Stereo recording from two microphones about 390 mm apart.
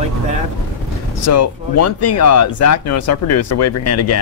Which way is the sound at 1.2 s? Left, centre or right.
Left.